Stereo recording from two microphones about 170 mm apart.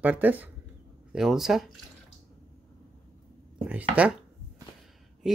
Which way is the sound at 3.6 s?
10° right (ahead or behind).